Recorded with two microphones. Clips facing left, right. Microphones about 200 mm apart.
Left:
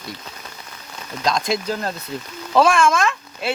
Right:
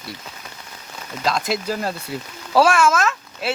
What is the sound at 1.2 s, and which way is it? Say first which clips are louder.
A man's voice: left 1 dB; 5° right (ahead or behind).